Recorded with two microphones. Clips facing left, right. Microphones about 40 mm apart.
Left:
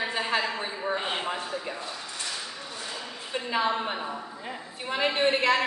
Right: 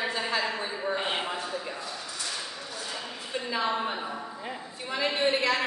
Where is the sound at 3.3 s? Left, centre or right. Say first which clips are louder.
Left 3 dB; left.